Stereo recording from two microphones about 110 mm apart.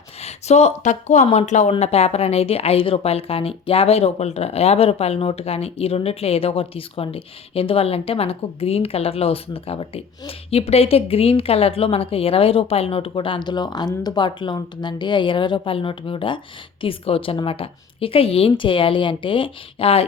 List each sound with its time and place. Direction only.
0.2 s speech: 85° left
1.8 s a woman's voice: 70° left (ahead or behind)